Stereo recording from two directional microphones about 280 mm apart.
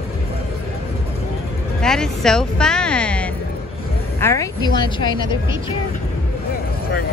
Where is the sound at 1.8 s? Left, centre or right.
Centre.